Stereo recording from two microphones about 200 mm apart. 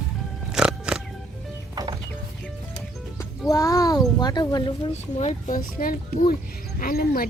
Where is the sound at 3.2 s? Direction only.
15° left (ahead or behind).